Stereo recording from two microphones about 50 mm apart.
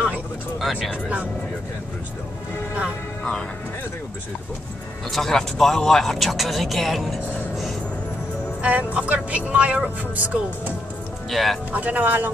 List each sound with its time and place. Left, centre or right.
0.6 s speech: centre
5.1 s speech: centre
8.6 s speech: right
10.1 s speech: right
11.2 s speech: centre
11.7 s speech: right